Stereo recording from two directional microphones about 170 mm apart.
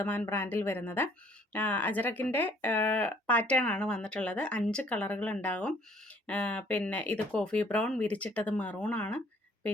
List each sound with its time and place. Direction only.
0.0 s speech: 10° left (ahead or behind)